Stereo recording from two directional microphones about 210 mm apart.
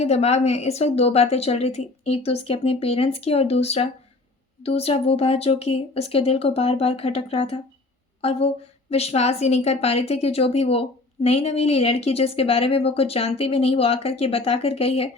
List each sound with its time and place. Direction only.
0.0 s a woman's voice: 30° left (ahead or behind)